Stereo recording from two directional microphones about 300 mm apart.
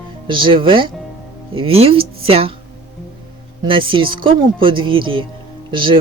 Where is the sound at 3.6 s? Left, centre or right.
Centre.